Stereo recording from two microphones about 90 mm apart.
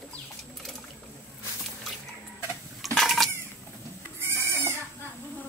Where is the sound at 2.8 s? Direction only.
Centre (ahead or behind).